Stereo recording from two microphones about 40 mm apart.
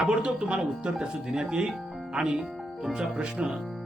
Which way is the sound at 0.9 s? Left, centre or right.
Centre.